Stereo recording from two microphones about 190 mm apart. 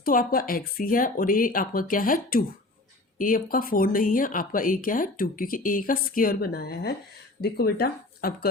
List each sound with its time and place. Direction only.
0.0 s speech: 50° left (ahead or behind)